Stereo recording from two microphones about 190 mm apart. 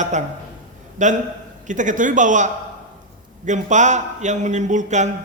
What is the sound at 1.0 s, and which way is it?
A man's voice, 40° right (ahead or behind).